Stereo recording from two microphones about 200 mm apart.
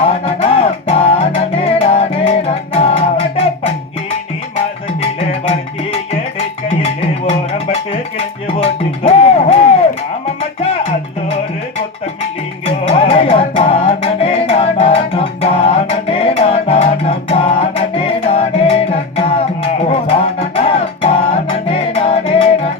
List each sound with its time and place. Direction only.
0.1 s music: 30° left (ahead or behind)
8.4 s music: 30° left (ahead or behind)
12.6 s music: 30° left (ahead or behind)